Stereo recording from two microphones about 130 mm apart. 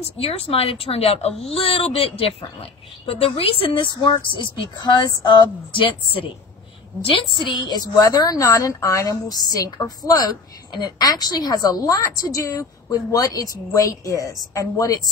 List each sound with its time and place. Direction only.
0.0 s speech: 50° left (ahead or behind)
7.3 s a woman's voice: 35° left (ahead or behind)